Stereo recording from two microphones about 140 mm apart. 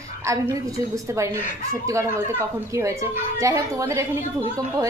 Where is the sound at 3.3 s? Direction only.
20° right (ahead or behind).